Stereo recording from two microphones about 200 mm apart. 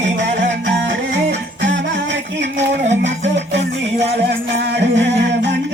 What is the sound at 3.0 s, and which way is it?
Music, 60° right (ahead or behind).